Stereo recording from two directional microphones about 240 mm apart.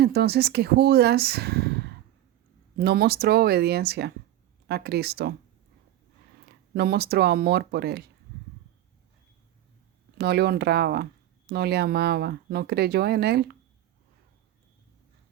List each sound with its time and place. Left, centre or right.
0.0 s speech: right
6.7 s speech: right
10.2 s speech: right